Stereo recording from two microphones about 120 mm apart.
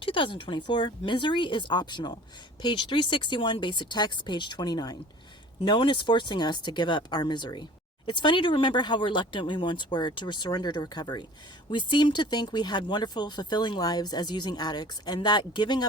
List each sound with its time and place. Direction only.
0.0 s speech: 45° left (ahead or behind)